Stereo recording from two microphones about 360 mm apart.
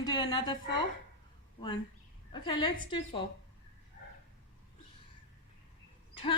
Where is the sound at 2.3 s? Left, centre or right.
Centre.